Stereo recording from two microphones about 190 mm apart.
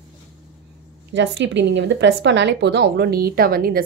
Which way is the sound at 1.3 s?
70° right (ahead or behind).